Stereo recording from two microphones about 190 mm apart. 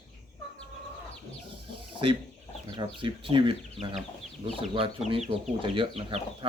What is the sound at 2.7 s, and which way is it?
Speech, 25° right (ahead or behind).